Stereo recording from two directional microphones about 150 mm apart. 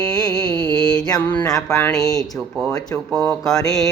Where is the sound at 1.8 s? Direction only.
5° left (ahead or behind).